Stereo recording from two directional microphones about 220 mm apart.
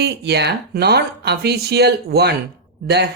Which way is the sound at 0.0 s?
50° right (ahead or behind).